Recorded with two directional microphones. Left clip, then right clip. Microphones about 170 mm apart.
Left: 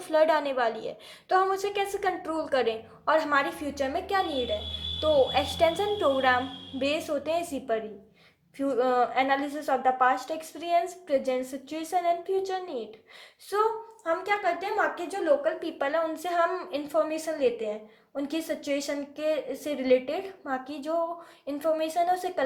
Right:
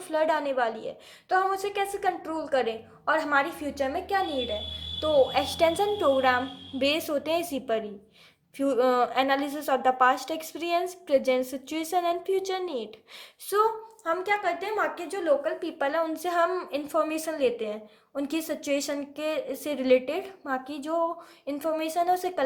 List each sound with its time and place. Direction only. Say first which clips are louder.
0.1 s a woman's voice: left 2 dB; 5° right (ahead or behind); by 22.4 s 20° right (ahead or behind)